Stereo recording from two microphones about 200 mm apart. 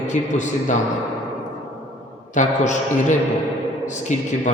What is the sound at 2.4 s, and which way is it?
A man's voice, 40° left (ahead or behind).